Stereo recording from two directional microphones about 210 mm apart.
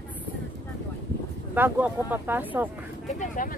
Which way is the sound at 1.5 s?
10° right (ahead or behind).